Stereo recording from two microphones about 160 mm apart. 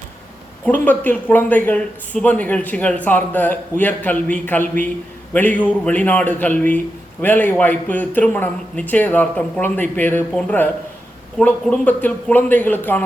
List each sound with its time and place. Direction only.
0.6 s a man's voice: 10° left (ahead or behind)